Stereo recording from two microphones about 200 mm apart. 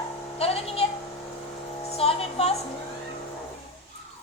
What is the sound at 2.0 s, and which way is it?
Speech, 30° left (ahead or behind).